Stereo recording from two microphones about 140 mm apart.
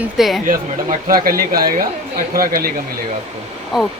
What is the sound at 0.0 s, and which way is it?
Speech, centre (ahead or behind).